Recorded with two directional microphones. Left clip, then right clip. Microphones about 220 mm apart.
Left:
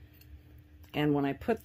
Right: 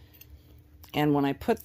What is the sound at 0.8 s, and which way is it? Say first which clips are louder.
Speech: right 4 dB; 30° right (ahead or behind).